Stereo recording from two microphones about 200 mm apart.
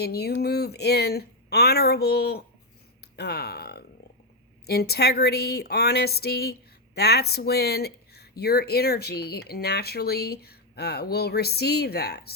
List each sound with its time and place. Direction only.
0.0 s speech: 50° left (ahead or behind)